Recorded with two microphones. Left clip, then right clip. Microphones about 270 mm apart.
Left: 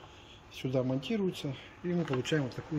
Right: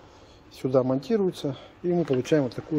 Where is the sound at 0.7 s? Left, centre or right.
Centre.